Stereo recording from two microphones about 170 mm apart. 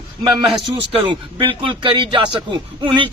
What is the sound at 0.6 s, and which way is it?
Speech, 30° right (ahead or behind).